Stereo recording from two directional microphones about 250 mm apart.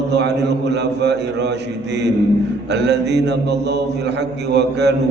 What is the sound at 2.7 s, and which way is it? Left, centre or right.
Mantra, right.